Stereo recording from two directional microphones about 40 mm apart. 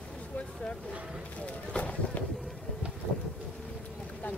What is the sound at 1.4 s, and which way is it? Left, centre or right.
Run, left.